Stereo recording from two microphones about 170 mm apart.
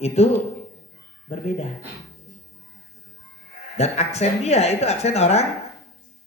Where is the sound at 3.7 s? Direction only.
40° left (ahead or behind).